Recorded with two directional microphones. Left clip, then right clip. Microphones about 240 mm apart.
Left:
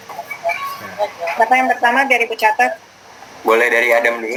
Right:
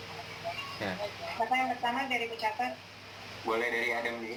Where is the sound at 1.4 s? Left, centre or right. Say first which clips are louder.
Left 17 dB; left.